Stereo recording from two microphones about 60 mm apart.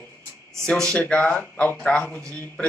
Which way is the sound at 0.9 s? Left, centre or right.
Left.